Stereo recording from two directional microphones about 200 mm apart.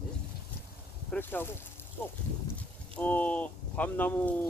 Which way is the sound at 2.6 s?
5° left (ahead or behind).